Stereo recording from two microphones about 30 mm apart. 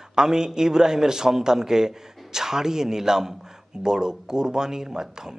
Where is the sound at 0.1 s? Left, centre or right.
Right.